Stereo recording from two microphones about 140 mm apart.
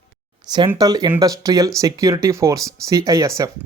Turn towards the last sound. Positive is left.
turn(degrees=-25)  # may be behind; listen again after turning